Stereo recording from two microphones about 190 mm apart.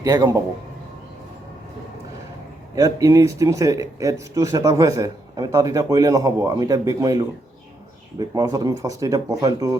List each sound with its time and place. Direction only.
0.0 s speech: 20° right (ahead or behind)
2.7 s speech: 15° right (ahead or behind)